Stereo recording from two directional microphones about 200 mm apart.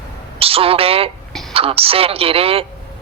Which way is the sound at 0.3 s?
30° right (ahead or behind).